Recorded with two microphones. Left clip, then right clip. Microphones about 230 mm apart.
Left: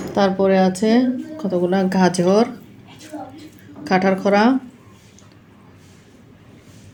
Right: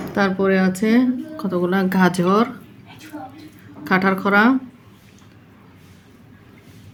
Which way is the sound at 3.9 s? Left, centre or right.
Centre.